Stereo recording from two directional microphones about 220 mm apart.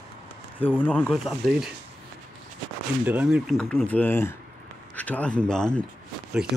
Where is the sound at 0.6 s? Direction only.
5° left (ahead or behind).